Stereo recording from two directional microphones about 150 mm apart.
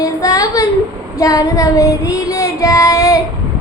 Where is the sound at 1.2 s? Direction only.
25° left (ahead or behind).